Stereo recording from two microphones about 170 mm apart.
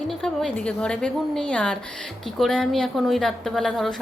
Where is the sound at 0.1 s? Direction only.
5° left (ahead or behind).